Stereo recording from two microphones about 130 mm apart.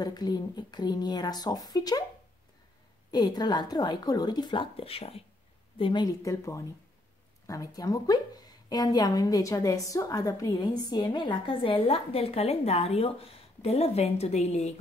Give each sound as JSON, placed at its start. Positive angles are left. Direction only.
{"t": 0.0, "sound": "a woman's voice", "side_deg": 30}
{"t": 3.1, "sound": "a woman's voice", "side_deg": 30}
{"t": 6.0, "sound": "a woman's voice", "side_deg": 25}